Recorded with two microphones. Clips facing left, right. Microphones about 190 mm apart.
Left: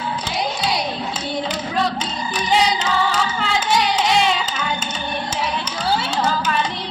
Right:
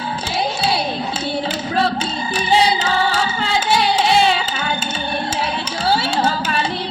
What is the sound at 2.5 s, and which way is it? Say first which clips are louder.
Music: right 2 dB; 30° right (ahead or behind).